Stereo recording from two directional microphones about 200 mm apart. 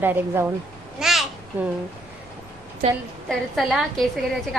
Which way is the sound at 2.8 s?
35° right (ahead or behind).